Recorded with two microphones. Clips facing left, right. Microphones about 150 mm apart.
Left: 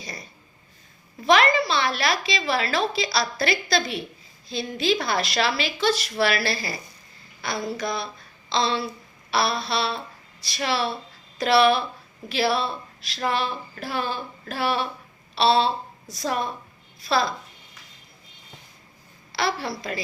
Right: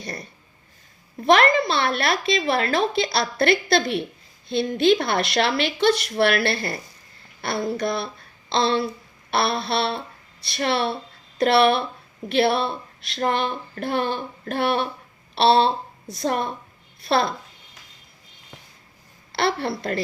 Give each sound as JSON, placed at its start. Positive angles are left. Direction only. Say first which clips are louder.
{"t": 0.0, "sound": "a sound", "louder": "right 5 dB", "side_deg": -60}
{"t": 1.2, "sound": "a woman's voice", "louder": "right 2 dB", "side_deg": -55}
{"t": 19.3, "sound": "a woman's voice", "louder": "right 3 dB", "side_deg": -60}